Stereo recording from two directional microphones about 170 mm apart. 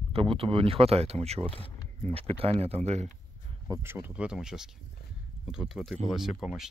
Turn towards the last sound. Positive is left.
turn(degrees=0)  # may be behind; listen again after turning